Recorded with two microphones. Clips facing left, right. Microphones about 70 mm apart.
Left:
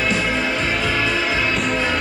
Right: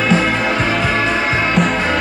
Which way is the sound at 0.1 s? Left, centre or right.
Right.